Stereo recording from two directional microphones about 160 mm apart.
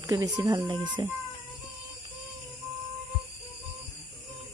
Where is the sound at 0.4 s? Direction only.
20° right (ahead or behind).